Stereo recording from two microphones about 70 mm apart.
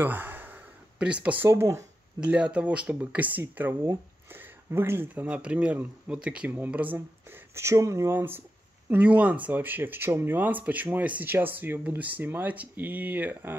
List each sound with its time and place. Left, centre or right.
0.0 s a sound: right
0.9 s speech: centre
1.4 s speech: right
2.2 s speech: centre
4.3 s a sound: right
5.1 s speech: centre
8.9 s speech: right